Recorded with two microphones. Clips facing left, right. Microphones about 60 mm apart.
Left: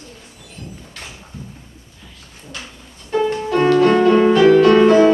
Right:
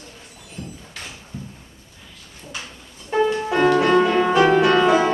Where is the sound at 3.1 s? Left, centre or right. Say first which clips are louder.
Left 1 dB; centre.